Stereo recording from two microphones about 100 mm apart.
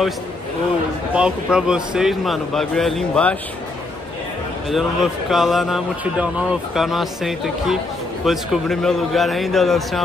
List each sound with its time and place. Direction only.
1.1 s a man's voice: 10° right (ahead or behind)
4.6 s a man's voice: centre (ahead or behind)